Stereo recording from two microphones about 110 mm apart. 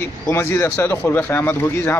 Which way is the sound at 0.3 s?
25° left (ahead or behind).